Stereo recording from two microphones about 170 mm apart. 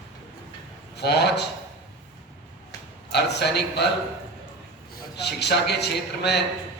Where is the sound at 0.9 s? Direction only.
75° left (ahead or behind).